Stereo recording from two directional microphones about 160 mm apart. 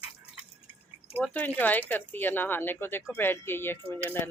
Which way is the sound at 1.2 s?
10° left (ahead or behind).